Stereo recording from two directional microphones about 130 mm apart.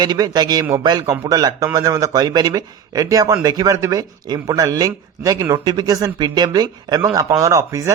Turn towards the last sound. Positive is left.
turn(degrees=-25)  # may be behind; listen again after turning